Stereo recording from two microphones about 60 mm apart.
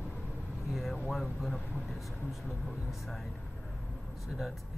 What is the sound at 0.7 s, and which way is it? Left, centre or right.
Speech, centre.